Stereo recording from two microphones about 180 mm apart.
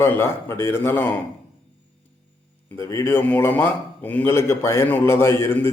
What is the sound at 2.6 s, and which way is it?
Speech, 15° left (ahead or behind).